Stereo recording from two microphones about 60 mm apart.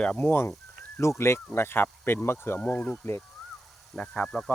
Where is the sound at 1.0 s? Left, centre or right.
Left.